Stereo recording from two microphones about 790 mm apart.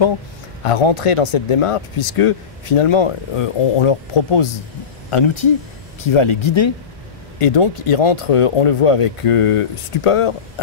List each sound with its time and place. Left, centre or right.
0.7 s speech: left